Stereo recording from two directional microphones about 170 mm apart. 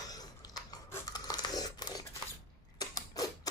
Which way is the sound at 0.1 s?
20° left (ahead or behind).